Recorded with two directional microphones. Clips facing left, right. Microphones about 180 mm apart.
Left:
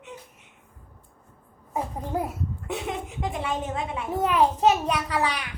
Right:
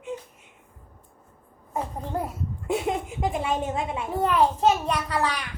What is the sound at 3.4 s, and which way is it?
Speech, 25° right (ahead or behind).